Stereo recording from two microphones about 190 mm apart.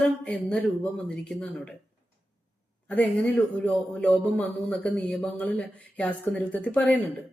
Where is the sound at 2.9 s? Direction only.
10° left (ahead or behind).